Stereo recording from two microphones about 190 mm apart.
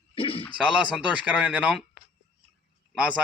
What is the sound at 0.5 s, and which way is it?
Speech, 5° right (ahead or behind).